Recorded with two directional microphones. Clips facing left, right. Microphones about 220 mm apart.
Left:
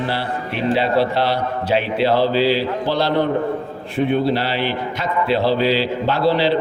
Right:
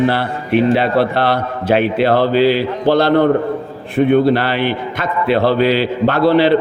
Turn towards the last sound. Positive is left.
turn(degrees=-55)  # may be behind; listen again after turning